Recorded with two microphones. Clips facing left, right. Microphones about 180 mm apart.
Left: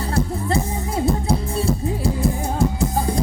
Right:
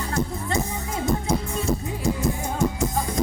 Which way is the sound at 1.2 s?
35° left (ahead or behind).